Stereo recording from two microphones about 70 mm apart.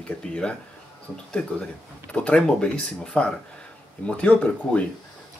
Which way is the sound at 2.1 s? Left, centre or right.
Centre.